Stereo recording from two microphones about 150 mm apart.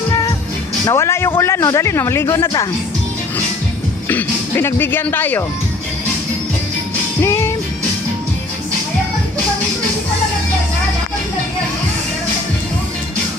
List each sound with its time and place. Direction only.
0.9 s speech: 20° left (ahead or behind)
4.1 s speech: 15° left (ahead or behind)
7.2 s music: 15° left (ahead or behind)